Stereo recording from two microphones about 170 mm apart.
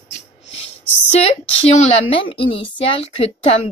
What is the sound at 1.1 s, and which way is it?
Speech, 40° left (ahead or behind).